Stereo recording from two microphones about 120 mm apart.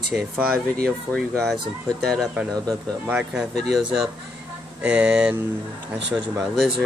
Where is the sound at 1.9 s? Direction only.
5° left (ahead or behind).